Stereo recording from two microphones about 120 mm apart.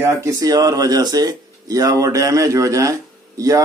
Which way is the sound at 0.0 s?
25° right (ahead or behind).